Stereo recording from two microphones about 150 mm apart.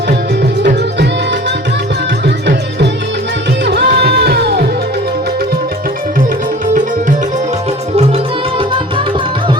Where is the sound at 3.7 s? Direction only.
90° right.